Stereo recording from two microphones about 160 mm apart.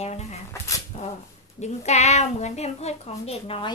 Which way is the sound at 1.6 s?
45° left (ahead or behind).